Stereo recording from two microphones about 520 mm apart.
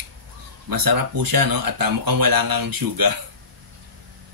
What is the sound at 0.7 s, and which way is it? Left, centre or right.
Speech, right.